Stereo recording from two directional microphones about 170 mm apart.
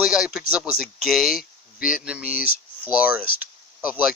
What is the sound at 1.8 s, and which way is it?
Speech, 55° left (ahead or behind).